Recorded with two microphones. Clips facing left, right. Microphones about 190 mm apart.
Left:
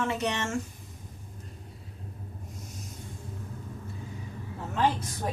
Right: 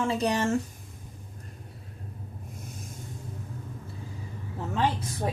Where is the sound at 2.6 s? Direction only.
50° right (ahead or behind).